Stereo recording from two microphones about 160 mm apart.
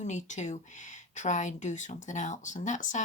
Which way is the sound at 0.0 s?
50° left (ahead or behind).